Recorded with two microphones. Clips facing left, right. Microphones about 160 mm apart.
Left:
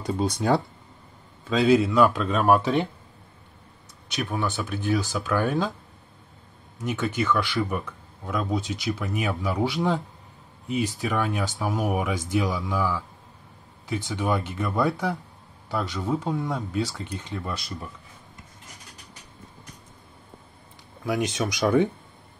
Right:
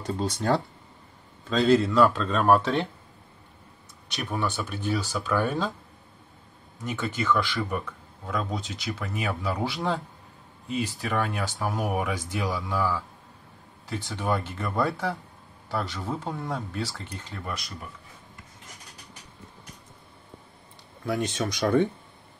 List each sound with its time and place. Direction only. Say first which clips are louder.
0.0 s speech: left 3 dB; 10° left (ahead or behind)
4.2 s speech: left 2 dB; centre (ahead or behind)
6.8 s speech: left 4 dB; 5° left (ahead or behind)
10.7 s speech: left 3 dB; 15° left (ahead or behind)
21.0 s speech: left 2 dB; 10° left (ahead or behind)